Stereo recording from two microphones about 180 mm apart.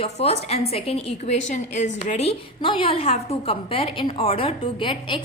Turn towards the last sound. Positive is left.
turn(degrees=25)  # may be behind; listen again after turning